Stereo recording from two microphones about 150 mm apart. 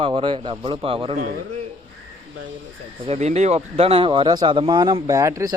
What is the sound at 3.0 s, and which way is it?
Speech, 45° right (ahead or behind).